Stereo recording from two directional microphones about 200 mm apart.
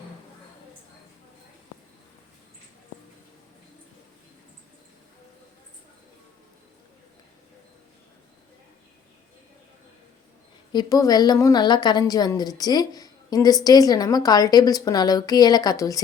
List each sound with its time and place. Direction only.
10.7 s a woman's voice: 20° left (ahead or behind)